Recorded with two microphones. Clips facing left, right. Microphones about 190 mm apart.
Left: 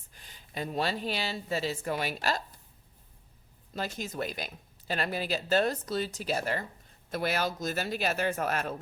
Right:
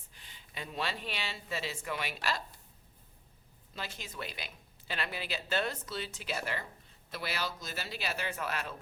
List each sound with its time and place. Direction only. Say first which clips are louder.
0.1 s speech: left 8 dB; 45° left (ahead or behind)
3.8 s speech: left 8 dB; 45° left (ahead or behind)